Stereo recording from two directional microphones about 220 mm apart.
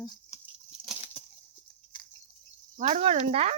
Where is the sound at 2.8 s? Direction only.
35° right (ahead or behind).